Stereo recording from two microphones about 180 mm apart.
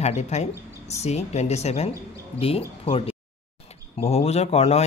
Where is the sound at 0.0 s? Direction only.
40° left (ahead or behind).